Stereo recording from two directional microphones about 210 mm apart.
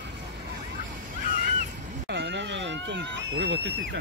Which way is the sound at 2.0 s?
55° right (ahead or behind).